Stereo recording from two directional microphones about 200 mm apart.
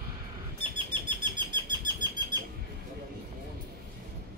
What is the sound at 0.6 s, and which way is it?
Bird, 25° right (ahead or behind).